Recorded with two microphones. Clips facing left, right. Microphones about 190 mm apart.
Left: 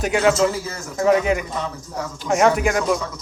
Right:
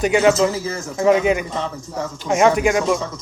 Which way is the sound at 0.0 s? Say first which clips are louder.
Right 2 dB; centre (ahead or behind).